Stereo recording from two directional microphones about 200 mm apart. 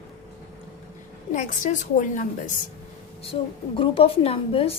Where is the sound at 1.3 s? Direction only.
40° left (ahead or behind).